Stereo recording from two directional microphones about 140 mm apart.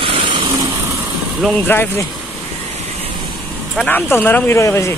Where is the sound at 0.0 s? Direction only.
40° right (ahead or behind).